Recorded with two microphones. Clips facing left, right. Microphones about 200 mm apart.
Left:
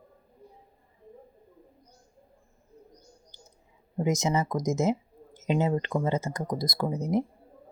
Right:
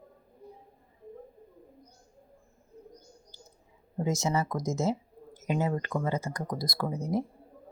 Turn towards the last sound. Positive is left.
turn(degrees=20)  # may be behind; listen again after turning